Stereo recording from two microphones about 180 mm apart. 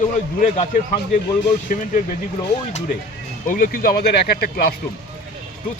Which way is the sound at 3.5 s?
50° left (ahead or behind).